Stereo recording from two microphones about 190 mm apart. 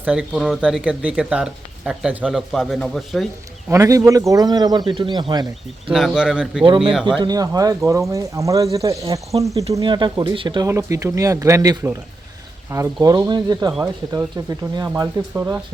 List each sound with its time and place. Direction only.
0.0 s speech: 5° right (ahead or behind)
3.7 s speech: 15° right (ahead or behind)
5.9 s speech: 5° right (ahead or behind)
6.7 s speech: 25° right (ahead or behind)